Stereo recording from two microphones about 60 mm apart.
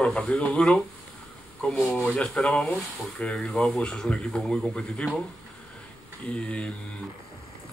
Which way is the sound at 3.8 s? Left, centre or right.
Centre.